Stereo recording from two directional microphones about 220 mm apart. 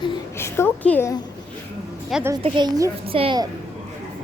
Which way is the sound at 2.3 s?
20° right (ahead or behind).